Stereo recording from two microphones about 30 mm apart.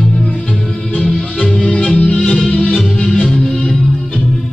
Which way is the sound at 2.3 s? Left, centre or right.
Centre.